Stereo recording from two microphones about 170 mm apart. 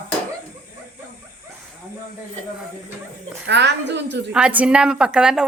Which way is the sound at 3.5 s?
90° right.